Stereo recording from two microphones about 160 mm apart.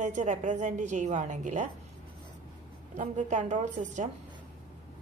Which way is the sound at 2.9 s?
50° right (ahead or behind).